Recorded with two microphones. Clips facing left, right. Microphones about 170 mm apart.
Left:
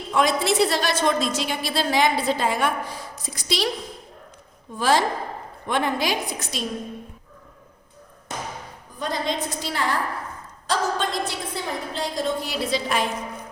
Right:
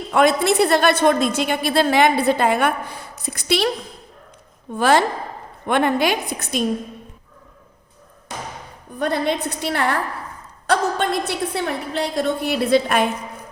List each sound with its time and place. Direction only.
0.1 s a woman's voice: 60° right (ahead or behind)
4.7 s a woman's voice: 60° right (ahead or behind)
9.0 s a woman's voice: 60° right (ahead or behind)